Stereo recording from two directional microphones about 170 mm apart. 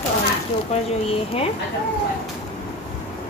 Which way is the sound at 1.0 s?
35° left (ahead or behind).